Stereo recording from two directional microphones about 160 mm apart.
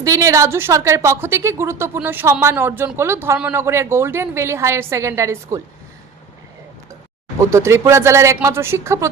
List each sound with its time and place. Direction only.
0.0 s a woman's voice: 20° right (ahead or behind)
7.5 s a woman's voice: 15° right (ahead or behind)